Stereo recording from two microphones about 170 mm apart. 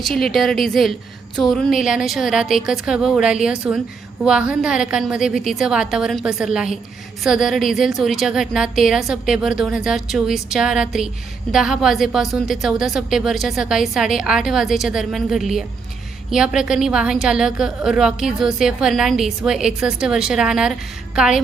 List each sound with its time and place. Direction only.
0.0 s a woman's voice: centre (ahead or behind)